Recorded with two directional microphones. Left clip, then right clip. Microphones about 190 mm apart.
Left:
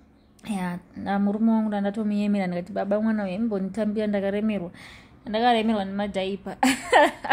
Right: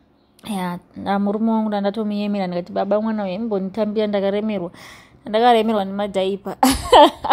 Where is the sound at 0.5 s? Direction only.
20° right (ahead or behind).